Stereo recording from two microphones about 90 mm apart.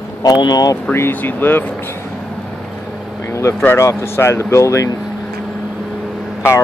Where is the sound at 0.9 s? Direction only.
25° left (ahead or behind).